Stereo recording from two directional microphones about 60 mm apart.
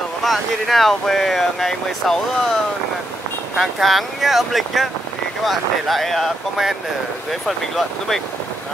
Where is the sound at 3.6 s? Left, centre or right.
Centre.